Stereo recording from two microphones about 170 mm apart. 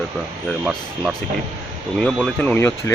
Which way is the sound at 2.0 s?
5° left (ahead or behind).